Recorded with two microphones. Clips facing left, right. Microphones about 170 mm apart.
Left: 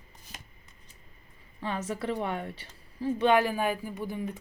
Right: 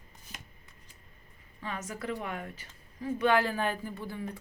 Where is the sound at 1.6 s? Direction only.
30° left (ahead or behind).